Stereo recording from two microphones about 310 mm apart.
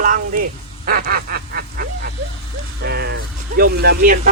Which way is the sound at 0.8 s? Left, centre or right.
Right.